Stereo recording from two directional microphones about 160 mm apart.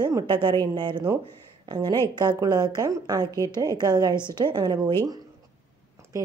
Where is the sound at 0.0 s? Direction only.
25° right (ahead or behind).